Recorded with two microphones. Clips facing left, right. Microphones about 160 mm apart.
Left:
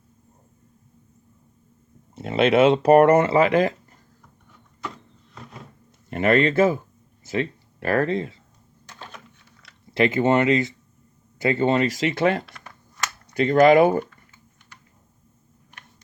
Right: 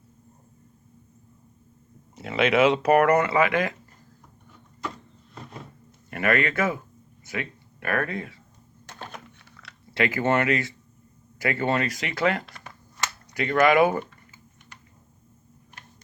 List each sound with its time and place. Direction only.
2.1 s speech: 30° left (ahead or behind)
6.1 s speech: 25° left (ahead or behind)
8.9 s typing: 50° right (ahead or behind)
9.4 s chewing: 70° right (ahead or behind)
9.9 s speech: 25° left (ahead or behind)